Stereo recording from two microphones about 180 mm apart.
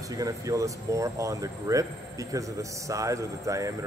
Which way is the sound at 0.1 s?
20° right (ahead or behind).